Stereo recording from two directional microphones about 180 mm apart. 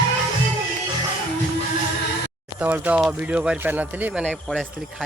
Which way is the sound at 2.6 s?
10° right (ahead or behind).